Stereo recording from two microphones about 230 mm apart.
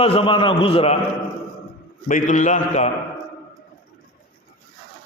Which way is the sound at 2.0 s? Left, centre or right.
Left.